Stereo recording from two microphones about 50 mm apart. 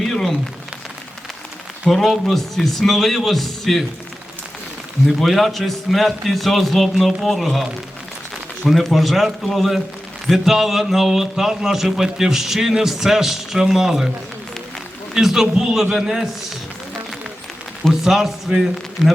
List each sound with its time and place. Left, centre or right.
0.0 s a sound: centre
1.9 s a man's voice: centre
5.0 s a man's voice: centre
15.1 s a man's voice: centre
18.0 s a man's voice: centre